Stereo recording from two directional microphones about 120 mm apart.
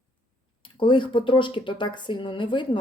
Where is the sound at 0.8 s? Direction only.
45° left (ahead or behind).